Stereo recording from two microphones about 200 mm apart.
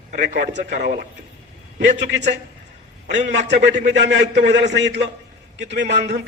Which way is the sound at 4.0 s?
60° right (ahead or behind).